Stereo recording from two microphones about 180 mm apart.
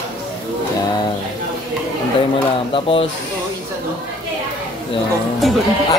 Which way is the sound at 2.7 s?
30° left (ahead or behind).